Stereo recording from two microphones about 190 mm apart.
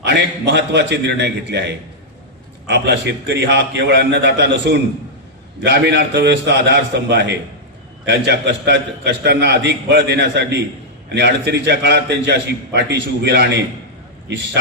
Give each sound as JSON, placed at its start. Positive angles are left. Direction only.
{"t": 0.0, "sound": "a man's voice", "side_deg": -65}